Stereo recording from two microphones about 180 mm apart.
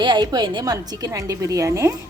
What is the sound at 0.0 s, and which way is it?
A woman's voice, 25° right (ahead or behind).